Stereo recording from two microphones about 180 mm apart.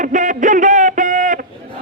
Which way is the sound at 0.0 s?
45° right (ahead or behind).